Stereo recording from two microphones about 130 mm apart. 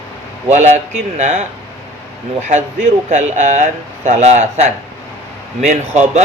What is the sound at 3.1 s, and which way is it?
Speech, 65° right (ahead or behind).